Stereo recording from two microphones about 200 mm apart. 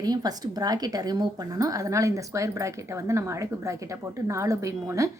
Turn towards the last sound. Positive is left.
turn(degrees=-15)  # may be behind; listen again after turning